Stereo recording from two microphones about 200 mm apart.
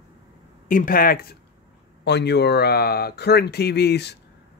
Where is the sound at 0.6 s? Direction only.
45° left (ahead or behind).